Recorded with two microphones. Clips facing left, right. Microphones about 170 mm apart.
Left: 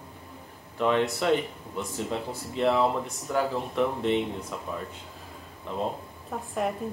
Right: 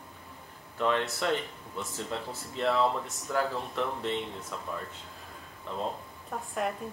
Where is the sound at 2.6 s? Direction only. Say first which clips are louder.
Left 3 dB; 15° left (ahead or behind).